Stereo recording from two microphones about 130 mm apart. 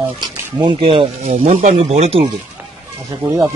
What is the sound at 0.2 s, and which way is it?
Speech, 35° right (ahead or behind).